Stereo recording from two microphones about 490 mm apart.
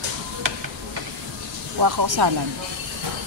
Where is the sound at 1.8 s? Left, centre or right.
Right.